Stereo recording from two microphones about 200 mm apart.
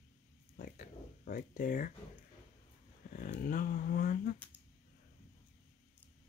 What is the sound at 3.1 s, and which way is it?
Speech, 45° left (ahead or behind).